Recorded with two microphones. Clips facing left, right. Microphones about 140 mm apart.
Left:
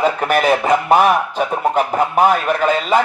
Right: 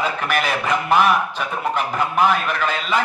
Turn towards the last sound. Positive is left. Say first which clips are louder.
# left 6 dB
turn(degrees=45)  # may be behind; listen again after turning